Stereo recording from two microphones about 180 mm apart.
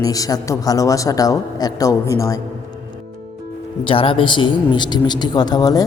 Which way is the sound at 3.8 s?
30° left (ahead or behind).